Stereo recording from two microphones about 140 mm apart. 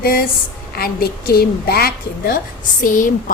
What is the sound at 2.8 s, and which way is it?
Speech, 70° left (ahead or behind).